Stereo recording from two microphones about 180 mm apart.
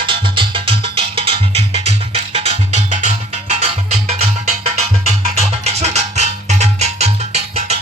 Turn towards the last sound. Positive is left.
turn(degrees=-35)  # may be behind; listen again after turning